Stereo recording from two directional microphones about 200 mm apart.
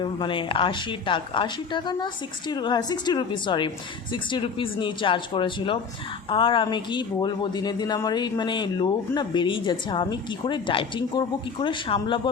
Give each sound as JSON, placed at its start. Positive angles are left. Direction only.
{"t": 0.0, "sound": "speech", "side_deg": 25}